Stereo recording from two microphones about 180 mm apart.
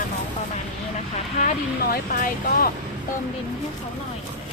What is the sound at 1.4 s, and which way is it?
Speech, 45° left (ahead or behind).